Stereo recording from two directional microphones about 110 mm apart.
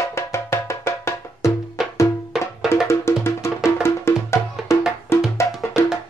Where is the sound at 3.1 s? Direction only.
25° left (ahead or behind).